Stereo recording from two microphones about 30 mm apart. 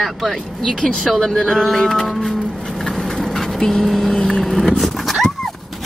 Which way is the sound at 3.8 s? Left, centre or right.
Centre.